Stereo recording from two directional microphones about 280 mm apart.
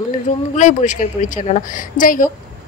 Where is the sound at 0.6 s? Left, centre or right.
Left.